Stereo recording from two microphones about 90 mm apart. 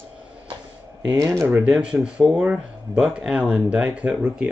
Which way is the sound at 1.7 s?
10° right (ahead or behind).